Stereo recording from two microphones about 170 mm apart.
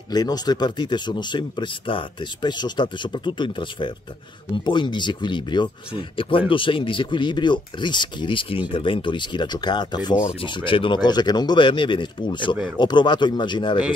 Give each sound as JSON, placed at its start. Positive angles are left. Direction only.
{"t": 0.1, "sound": "speech", "side_deg": 25}